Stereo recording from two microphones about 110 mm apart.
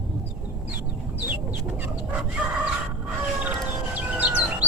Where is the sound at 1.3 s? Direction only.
15° right (ahead or behind).